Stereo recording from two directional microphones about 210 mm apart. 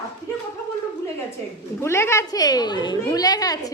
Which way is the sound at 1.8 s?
10° left (ahead or behind).